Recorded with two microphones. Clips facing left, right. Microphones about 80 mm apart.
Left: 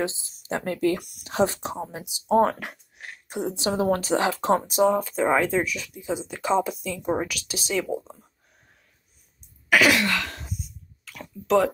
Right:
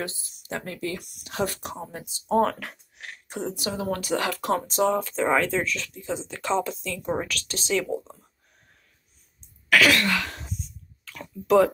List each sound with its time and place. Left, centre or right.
0.5 s speech: left
0.7 s speech: left
1.2 s speech: left
3.0 s a sound: centre
3.5 s speech: left
4.7 s speech: centre
9.7 s throat clearing: centre
11.1 s speech: centre